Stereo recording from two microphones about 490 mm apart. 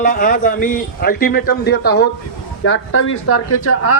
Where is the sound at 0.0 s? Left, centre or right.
Centre.